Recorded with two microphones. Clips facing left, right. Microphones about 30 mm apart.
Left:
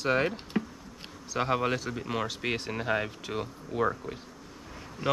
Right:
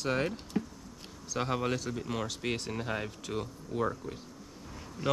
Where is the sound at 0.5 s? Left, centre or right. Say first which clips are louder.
Left 2 dB; left.